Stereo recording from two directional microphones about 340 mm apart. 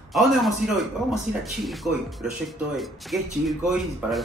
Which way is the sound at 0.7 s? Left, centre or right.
Centre.